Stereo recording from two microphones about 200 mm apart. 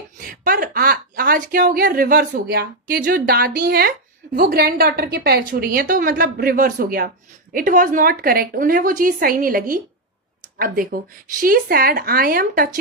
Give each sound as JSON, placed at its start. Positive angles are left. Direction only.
{"t": 0.2, "sound": "a woman's voice", "side_deg": -45}